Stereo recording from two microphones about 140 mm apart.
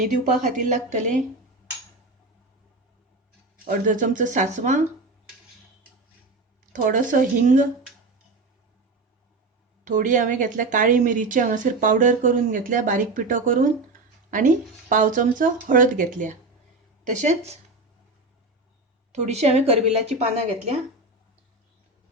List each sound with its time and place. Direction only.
0.4 s speech: 65° right (ahead or behind)
3.7 s speech: 70° right (ahead or behind)
6.7 s a woman's voice: 70° right (ahead or behind)
9.8 s a woman's voice: 65° right (ahead or behind)
19.1 s speech: 50° right (ahead or behind)